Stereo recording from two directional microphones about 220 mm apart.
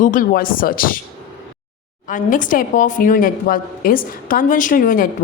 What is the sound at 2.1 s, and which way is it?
A woman's voice, 35° left (ahead or behind).